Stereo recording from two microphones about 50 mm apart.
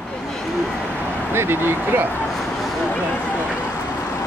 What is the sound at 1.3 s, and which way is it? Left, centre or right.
Speech, right.